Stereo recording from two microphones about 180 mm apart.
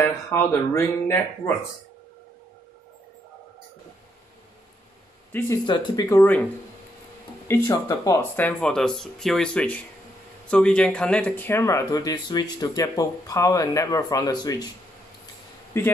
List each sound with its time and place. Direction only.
0.0 s speech: 15° left (ahead or behind)
5.7 s speech: 20° left (ahead or behind)
7.4 s speech: 15° left (ahead or behind)
15.7 s speech: 15° left (ahead or behind)